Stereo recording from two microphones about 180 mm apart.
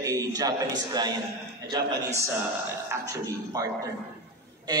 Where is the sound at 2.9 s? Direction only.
20° right (ahead or behind).